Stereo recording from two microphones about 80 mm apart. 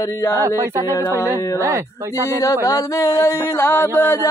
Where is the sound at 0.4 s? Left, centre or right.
Right.